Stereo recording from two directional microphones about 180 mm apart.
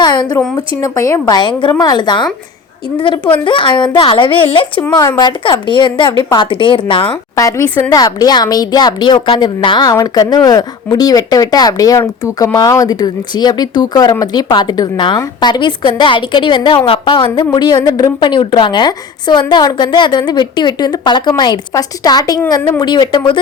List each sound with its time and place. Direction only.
0.0 s a sound: 25° left (ahead or behind)
0.8 s speech: 15° left (ahead or behind)
3.4 s speech: 25° left (ahead or behind)
7.3 s speech: 15° left (ahead or behind)